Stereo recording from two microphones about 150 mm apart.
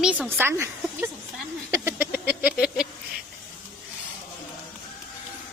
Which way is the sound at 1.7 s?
15° right (ahead or behind).